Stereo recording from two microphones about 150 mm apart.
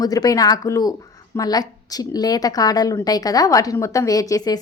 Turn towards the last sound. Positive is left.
turn(degrees=25)  # may be behind; listen again after turning